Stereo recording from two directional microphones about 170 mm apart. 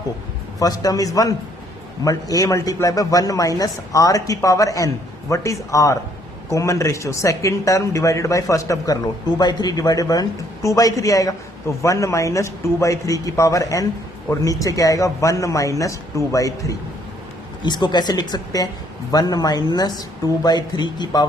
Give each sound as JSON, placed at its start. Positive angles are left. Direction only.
{"t": 0.6, "sound": "a man's voice", "side_deg": 20}